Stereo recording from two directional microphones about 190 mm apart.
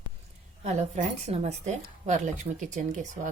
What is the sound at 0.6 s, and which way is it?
A woman's voice, 35° right (ahead or behind).